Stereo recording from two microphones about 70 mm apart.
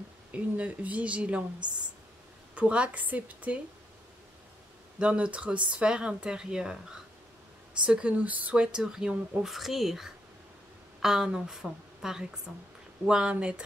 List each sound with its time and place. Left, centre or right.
0.3 s speech: right
2.5 s speech: centre
4.9 s speech: centre
7.8 s a woman's voice: centre
13.0 s speech: centre